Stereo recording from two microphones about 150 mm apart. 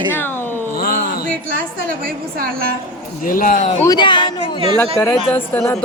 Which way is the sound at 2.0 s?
75° right (ahead or behind).